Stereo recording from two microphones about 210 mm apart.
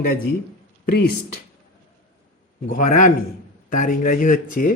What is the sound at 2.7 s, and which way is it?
Speech, 40° left (ahead or behind).